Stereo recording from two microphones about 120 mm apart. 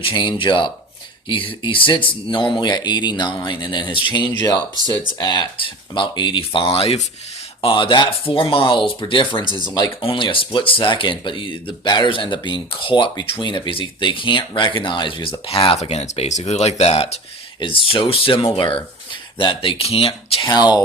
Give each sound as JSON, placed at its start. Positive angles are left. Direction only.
{"t": 0.0, "sound": "speech", "side_deg": 45}
{"t": 7.6, "sound": "speech", "side_deg": 45}
{"t": 9.4, "sound": "speech", "side_deg": -35}
{"t": 10.0, "sound": "speech", "side_deg": 45}
{"t": 17.6, "sound": "speech", "side_deg": 45}